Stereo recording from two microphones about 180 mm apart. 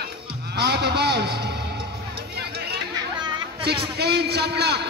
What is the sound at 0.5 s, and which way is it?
Vehicle, 65° right (ahead or behind).